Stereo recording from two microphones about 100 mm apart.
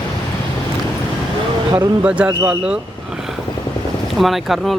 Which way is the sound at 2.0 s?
10° right (ahead or behind).